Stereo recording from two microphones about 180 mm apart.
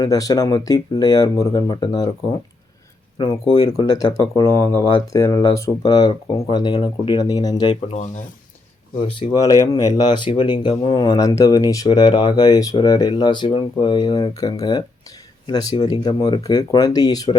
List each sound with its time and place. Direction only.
0.0 s speech: 20° left (ahead or behind)
3.2 s speech: 25° left (ahead or behind)
3.7 s speech: 20° left (ahead or behind)
9.0 s speech: 25° left (ahead or behind)